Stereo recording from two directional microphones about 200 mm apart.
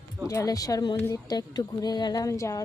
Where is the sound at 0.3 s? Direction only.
15° left (ahead or behind).